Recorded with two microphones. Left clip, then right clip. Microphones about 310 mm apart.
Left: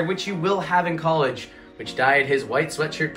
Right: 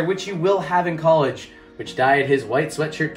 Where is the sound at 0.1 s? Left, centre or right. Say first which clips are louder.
Right 3 dB; centre.